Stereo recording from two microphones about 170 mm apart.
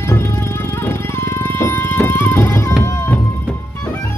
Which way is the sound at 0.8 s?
15° left (ahead or behind).